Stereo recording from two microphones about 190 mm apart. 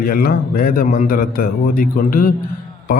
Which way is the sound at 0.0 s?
50° left (ahead or behind).